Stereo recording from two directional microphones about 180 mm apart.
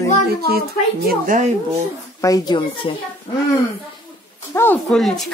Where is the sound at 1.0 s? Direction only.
50° right (ahead or behind).